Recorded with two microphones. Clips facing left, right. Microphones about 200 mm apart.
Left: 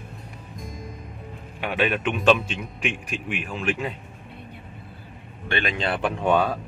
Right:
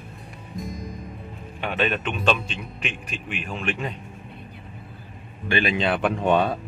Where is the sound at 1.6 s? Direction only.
10° left (ahead or behind).